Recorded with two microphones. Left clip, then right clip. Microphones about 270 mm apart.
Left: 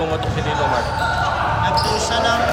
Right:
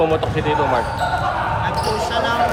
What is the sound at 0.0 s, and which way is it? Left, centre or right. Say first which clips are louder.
Basketball bounce: right 4 dB; right.